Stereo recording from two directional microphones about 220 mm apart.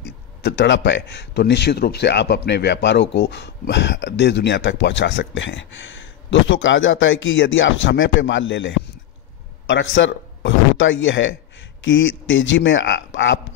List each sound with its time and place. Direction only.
0.0 s a man's voice: 50° left (ahead or behind)